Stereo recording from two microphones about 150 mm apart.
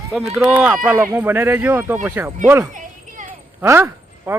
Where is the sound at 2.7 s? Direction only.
60° right (ahead or behind).